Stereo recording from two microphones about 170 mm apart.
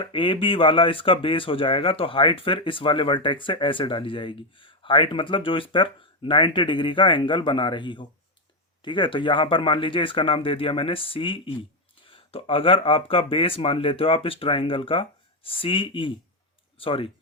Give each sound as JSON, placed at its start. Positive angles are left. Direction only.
{"t": 0.1, "sound": "speech", "side_deg": 30}